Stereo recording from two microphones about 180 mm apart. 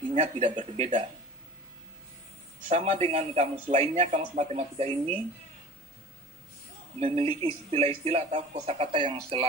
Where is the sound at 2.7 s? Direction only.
30° right (ahead or behind).